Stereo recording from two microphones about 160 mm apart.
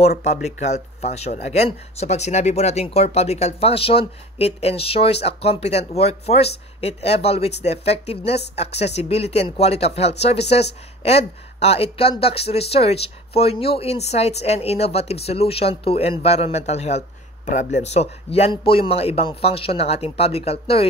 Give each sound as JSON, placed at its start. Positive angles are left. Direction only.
{"t": 0.2, "sound": "speech", "side_deg": 45}